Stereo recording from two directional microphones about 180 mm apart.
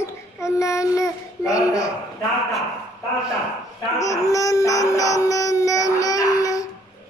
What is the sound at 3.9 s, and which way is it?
Music, 20° left (ahead or behind).